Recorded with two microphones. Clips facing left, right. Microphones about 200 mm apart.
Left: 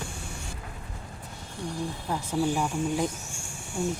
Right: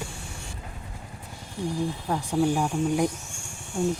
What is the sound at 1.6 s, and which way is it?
Speech, 15° right (ahead or behind).